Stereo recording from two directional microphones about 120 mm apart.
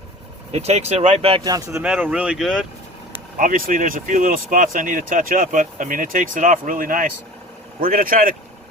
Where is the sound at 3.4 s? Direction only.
90° right.